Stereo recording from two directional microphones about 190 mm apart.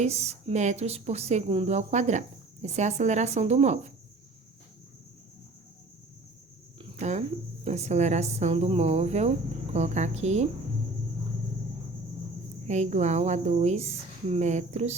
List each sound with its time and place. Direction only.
0.0 s speech: 35° right (ahead or behind)
6.7 s speech: 35° right (ahead or behind)
12.6 s speech: 35° right (ahead or behind)